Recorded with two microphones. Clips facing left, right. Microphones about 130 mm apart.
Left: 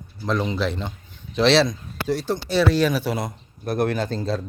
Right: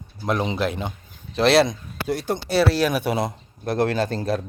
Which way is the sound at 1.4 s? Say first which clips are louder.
Right 1 dB; 50° right (ahead or behind).